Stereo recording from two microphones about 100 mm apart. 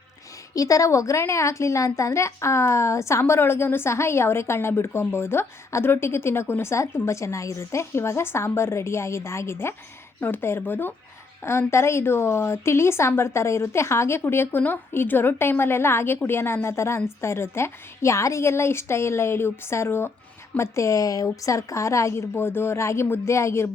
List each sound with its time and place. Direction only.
0.5 s a woman's voice: 35° left (ahead or behind)